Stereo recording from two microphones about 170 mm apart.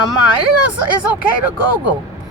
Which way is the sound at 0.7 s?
5° right (ahead or behind).